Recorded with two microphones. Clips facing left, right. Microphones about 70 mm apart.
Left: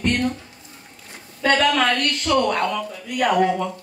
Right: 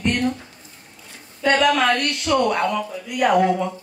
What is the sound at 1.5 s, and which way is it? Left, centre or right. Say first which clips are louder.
Speech: right 1 dB; centre.